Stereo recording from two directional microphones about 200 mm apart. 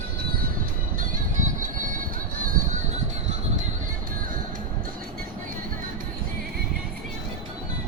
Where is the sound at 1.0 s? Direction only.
40° right (ahead or behind).